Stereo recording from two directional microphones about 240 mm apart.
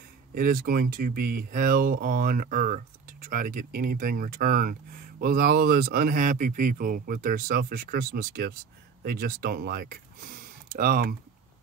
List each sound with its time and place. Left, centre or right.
0.3 s speech: right